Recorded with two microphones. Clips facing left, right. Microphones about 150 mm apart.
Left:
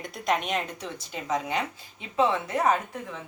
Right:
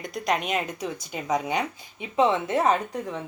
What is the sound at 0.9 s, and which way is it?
A woman's voice, 15° right (ahead or behind).